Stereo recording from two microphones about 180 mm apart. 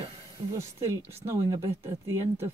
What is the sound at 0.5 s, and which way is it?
Speech, 15° right (ahead or behind).